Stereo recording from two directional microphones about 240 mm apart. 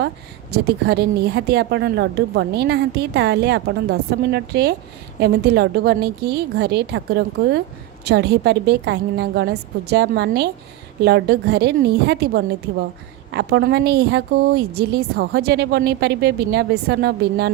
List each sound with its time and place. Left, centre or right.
0.5 s a woman's voice: right